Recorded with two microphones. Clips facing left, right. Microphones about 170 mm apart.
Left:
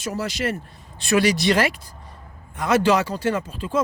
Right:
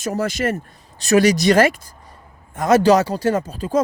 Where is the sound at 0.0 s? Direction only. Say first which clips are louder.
Right 4 dB; 50° right (ahead or behind).